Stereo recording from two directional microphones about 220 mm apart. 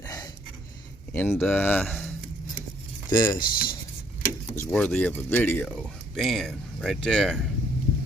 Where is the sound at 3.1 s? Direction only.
20° left (ahead or behind).